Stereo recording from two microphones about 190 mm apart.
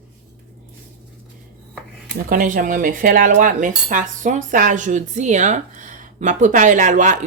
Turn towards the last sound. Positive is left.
turn(degrees=-40)  # may be behind; listen again after turning